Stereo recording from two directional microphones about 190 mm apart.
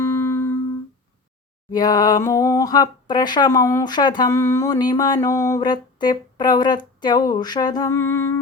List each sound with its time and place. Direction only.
0.0 s music: 10° left (ahead or behind)
1.7 s speech: 20° left (ahead or behind)